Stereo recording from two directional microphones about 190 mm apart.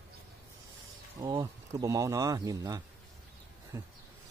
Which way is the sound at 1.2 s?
20° right (ahead or behind).